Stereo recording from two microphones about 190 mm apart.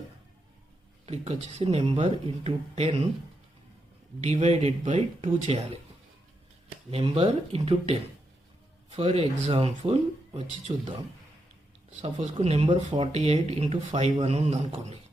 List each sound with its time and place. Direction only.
1.0 s speech: 35° right (ahead or behind)
4.2 s speech: 35° right (ahead or behind)
6.9 s speech: 30° right (ahead or behind)
9.0 s speech: 30° right (ahead or behind)
12.2 s speech: 35° right (ahead or behind)